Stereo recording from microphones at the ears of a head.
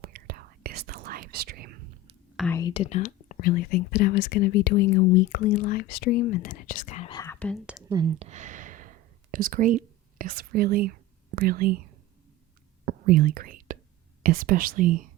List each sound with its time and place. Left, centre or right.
0.0 s whispering: right
2.6 s speech: left
7.9 s a sound: right
12.8 s whispering: right
14.2 s speech: right